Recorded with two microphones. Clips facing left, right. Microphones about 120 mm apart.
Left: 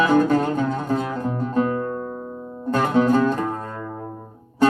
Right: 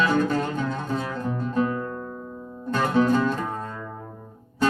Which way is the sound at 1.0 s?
20° left (ahead or behind).